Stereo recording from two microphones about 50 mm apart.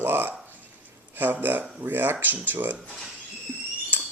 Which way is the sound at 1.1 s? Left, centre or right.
Right.